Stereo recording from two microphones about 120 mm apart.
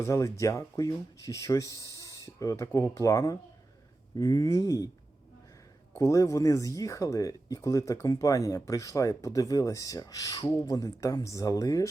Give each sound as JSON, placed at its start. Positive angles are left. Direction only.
{"t": 0.0, "sound": "speech", "side_deg": 25}
{"t": 6.0, "sound": "speech", "side_deg": 25}